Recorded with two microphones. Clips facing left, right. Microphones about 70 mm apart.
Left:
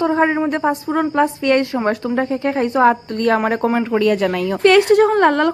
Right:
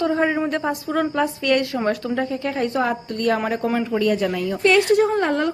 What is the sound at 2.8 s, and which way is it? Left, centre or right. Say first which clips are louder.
A woman's voice: left 7 dB; left.